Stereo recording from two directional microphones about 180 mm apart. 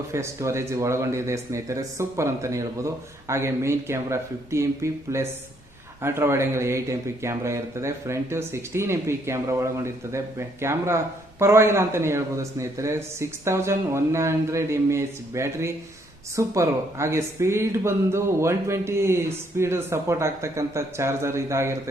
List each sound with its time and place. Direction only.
0.1 s a man's voice: 15° right (ahead or behind)